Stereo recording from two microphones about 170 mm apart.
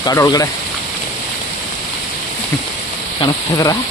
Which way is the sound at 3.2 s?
20° left (ahead or behind).